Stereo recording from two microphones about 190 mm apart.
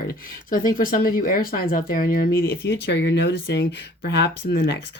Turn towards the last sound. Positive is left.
turn(degrees=60)  # may be behind; listen again after turning